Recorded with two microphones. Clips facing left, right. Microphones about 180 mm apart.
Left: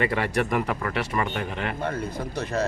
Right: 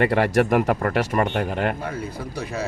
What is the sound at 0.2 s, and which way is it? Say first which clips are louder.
Speech: right 6 dB; 45° right (ahead or behind).